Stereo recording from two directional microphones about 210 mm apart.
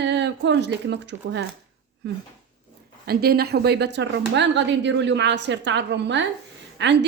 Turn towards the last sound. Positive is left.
turn(degrees=-60)  # may be behind; listen again after turning